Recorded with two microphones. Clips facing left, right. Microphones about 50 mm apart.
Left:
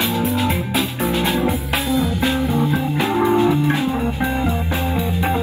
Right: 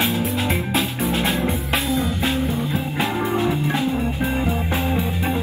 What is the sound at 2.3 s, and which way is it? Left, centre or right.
Music, left.